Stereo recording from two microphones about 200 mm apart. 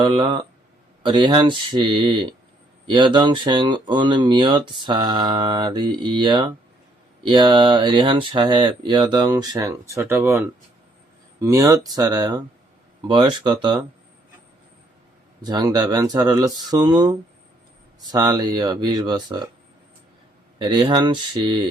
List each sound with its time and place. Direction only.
0.0 s speech: 25° right (ahead or behind)
15.4 s speech: 20° right (ahead or behind)
20.6 s speech: 20° right (ahead or behind)